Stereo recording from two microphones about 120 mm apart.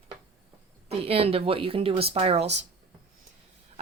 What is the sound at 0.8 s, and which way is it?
Speech, 55° right (ahead or behind).